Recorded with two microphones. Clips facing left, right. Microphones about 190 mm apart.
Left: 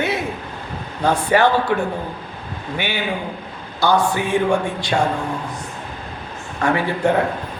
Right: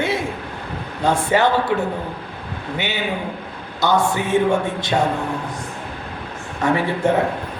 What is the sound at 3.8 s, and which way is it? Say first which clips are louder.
A man's voice: left 1 dB; 20° right (ahead or behind).